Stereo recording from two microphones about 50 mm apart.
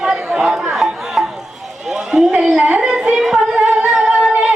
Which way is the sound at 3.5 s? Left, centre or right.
Right.